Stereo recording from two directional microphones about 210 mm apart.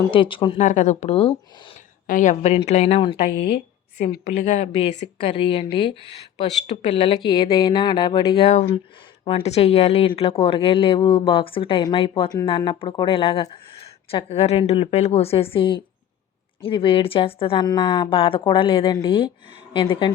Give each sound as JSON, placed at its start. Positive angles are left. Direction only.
{"t": 0.1, "sound": "speech", "side_deg": 25}
{"t": 0.6, "sound": "speech", "side_deg": 35}
{"t": 2.0, "sound": "speech", "side_deg": 35}
{"t": 3.2, "sound": "speech", "side_deg": 50}
{"t": 4.4, "sound": "speech", "side_deg": 30}
{"t": 8.4, "sound": "speech", "side_deg": 35}